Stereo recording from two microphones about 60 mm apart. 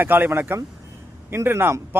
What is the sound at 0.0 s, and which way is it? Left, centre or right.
A man's voice, right.